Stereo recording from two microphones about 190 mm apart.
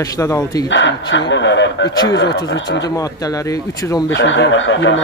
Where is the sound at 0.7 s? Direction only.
75° left (ahead or behind).